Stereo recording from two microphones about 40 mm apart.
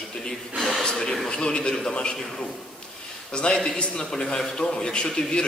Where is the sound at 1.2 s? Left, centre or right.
Centre.